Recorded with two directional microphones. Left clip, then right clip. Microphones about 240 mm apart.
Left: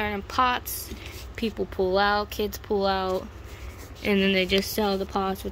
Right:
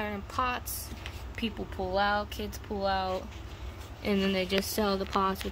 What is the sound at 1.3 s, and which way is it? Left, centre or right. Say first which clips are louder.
Speech: left 8 dB; left.